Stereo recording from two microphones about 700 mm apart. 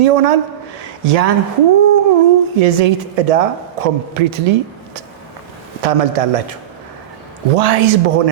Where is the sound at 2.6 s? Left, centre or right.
Right.